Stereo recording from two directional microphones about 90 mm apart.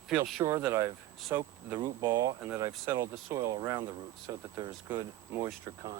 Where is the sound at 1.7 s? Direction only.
50° right (ahead or behind).